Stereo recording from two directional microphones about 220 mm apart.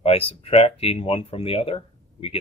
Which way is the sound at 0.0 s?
25° left (ahead or behind).